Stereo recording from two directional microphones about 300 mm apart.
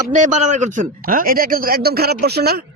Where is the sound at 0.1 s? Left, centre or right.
Right.